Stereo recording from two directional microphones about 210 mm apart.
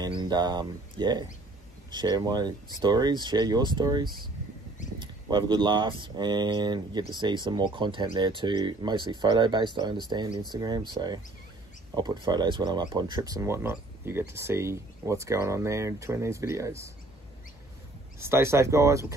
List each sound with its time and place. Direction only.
0.0 s speech: 20° right (ahead or behind)
18.2 s speech: 10° right (ahead or behind)